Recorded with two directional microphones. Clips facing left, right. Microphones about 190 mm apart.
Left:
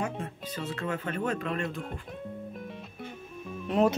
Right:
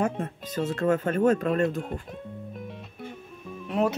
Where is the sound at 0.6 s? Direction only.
45° right (ahead or behind).